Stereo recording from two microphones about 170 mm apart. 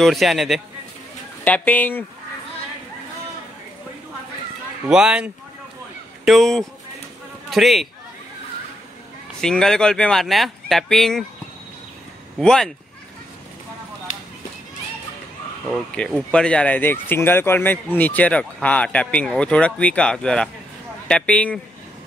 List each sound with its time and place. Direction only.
0.0 s speech: centre (ahead or behind)
1.4 s speech: 10° left (ahead or behind)
4.8 s speech: 5° right (ahead or behind)
9.4 s speech: 5° left (ahead or behind)
12.4 s speech: 5° left (ahead or behind)
15.7 s speech: 5° left (ahead or behind)